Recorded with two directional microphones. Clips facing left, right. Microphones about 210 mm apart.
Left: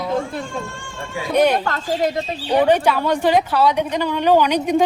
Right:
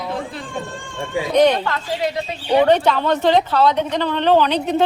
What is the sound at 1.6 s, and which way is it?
Speech, 45° left (ahead or behind).